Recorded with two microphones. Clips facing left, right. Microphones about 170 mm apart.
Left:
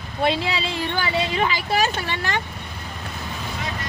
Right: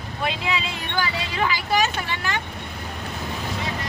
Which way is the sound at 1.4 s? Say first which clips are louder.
Left 1 dB; 25° left (ahead or behind).